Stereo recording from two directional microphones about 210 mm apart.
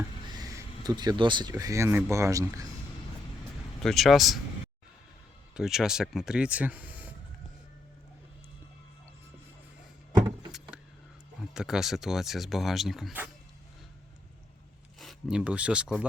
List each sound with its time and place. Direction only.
0.3 s speech: 15° right (ahead or behind)
3.8 s speech: centre (ahead or behind)
5.5 s speech: 5° right (ahead or behind)
10.7 s vehicle: 5° right (ahead or behind)
11.5 s speech: centre (ahead or behind)
14.9 s speech: centre (ahead or behind)